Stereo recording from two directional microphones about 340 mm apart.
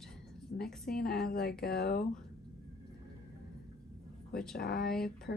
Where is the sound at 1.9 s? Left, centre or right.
Centre.